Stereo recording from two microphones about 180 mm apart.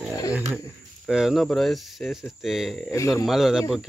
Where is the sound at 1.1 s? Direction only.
Centre (ahead or behind).